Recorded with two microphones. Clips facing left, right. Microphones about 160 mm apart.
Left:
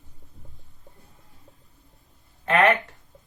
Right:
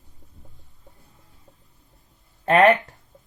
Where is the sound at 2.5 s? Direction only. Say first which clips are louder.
Right 4 dB; 40° right (ahead or behind).